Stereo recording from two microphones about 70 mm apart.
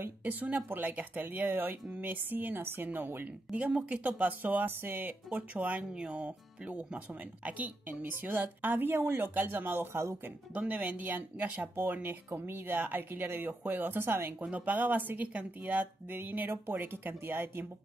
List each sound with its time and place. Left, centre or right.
0.2 s speech: right
3.5 s speech: centre
11.7 s speech: right
14.4 s speech: centre